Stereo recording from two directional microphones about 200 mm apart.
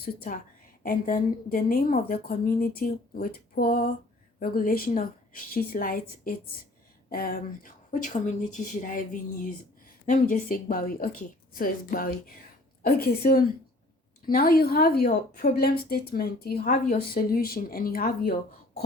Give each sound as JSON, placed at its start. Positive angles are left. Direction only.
{"t": 0.0, "sound": "a woman's voice", "side_deg": 50}